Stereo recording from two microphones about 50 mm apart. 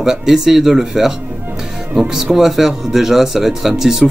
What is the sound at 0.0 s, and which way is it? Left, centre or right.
Speech, centre.